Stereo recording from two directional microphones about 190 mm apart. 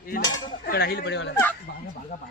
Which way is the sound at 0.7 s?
55° left (ahead or behind).